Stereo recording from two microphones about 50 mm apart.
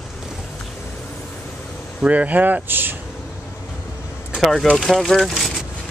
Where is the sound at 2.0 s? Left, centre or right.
Right.